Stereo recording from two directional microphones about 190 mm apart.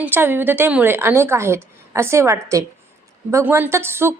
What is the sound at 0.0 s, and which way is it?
A woman's voice, 10° right (ahead or behind).